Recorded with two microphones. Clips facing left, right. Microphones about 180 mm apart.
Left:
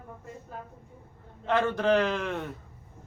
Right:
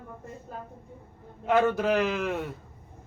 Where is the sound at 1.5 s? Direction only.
10° right (ahead or behind).